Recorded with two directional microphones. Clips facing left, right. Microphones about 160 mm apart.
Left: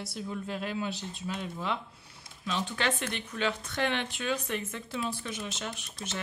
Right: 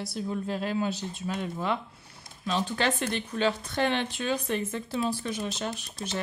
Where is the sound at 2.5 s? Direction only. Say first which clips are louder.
Right 4 dB; 35° right (ahead or behind).